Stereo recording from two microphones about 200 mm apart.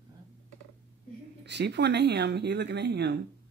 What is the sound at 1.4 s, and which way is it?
Speech, 60° right (ahead or behind).